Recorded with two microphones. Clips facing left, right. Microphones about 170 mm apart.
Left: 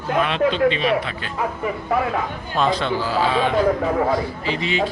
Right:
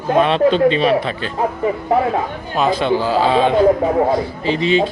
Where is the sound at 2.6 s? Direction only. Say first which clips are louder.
Right 4 dB; 10° right (ahead or behind).